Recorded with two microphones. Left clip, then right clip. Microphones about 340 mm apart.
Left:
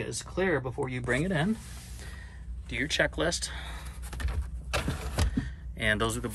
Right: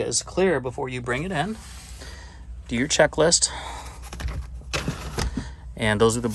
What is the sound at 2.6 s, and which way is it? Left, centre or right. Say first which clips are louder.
Speech: right 8 dB; centre.